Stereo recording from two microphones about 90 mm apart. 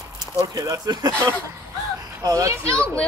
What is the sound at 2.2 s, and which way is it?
Speech, 40° right (ahead or behind).